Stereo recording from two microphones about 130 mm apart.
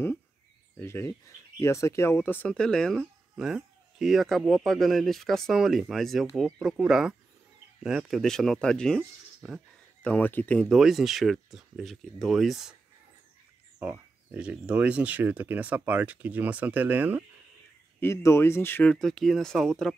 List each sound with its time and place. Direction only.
0.7 s speech: 20° left (ahead or behind); by 9.6 s centre (ahead or behind)
10.0 s speech: 10° left (ahead or behind)
10.7 s speech: centre (ahead or behind)
13.7 s speech: 15° right (ahead or behind)
18.0 s speech: 20° left (ahead or behind)
18.9 s speech: 5° left (ahead or behind)